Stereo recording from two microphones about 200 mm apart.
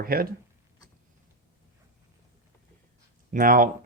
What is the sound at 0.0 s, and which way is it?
Speech, 50° right (ahead or behind).